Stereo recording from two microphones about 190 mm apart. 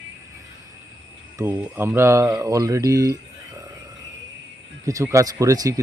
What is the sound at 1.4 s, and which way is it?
Speech, 10° right (ahead or behind).